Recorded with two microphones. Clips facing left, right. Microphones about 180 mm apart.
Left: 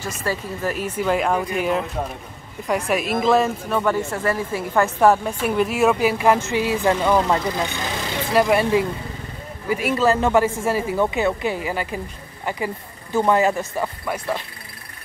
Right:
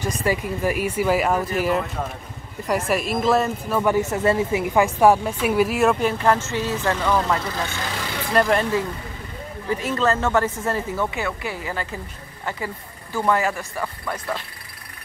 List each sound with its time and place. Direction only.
0.0 s a woman's voice: 15° right (ahead or behind)
3.8 s a woman's voice: 20° right (ahead or behind); by 7.7 s 20° left (ahead or behind)
8.3 s a woman's voice: 5° left (ahead or behind)